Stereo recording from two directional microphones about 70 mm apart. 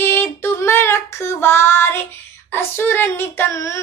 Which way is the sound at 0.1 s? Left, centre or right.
Left.